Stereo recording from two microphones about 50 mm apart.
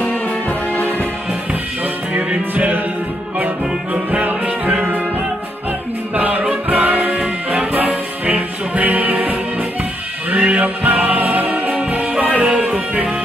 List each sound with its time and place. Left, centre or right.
0.0 s music: left
2.1 s music: right
6.1 s music: right
12.4 s music: right